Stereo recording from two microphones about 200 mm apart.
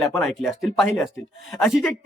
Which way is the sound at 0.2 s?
Centre (ahead or behind).